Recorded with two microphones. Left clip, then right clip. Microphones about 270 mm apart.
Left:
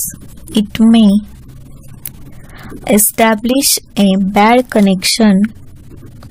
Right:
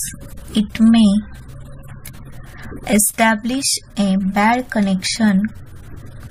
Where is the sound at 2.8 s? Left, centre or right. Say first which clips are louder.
Left 5 dB; left.